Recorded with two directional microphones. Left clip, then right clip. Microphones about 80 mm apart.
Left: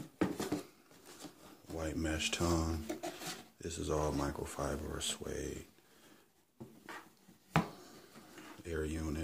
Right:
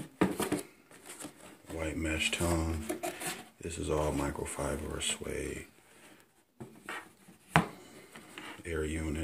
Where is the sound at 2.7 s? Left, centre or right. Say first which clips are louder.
Right 4 dB; left.